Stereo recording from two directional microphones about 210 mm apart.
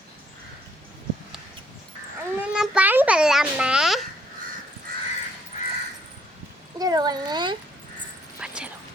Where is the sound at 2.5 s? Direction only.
5° right (ahead or behind).